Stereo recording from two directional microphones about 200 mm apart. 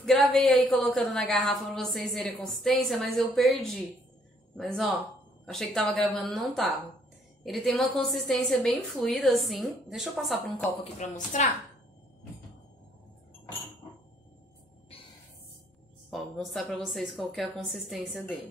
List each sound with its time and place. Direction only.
0.0 s a woman's voice: centre (ahead or behind)
10.8 s a woman's voice: 35° left (ahead or behind)
16.1 s a woman's voice: centre (ahead or behind)